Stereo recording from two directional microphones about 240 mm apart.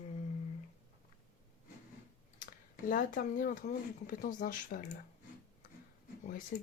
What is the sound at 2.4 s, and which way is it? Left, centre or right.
Speech, left.